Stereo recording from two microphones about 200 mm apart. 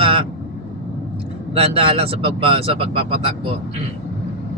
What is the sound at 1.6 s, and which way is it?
Speech, 30° right (ahead or behind).